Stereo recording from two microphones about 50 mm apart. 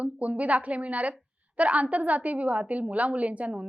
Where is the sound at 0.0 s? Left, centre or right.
Right.